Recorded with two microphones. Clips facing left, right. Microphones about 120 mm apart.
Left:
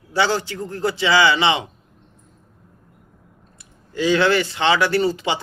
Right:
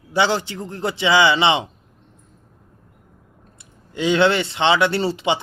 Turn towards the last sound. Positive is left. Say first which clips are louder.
# left 1 dB
turn(degrees=-25)  # may be behind; listen again after turning